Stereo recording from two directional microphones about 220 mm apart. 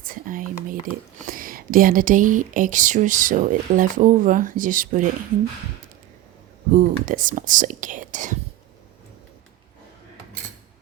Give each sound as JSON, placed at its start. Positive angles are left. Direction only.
{"t": 0.0, "sound": "speech", "side_deg": -40}
{"t": 6.7, "sound": "speech", "side_deg": -35}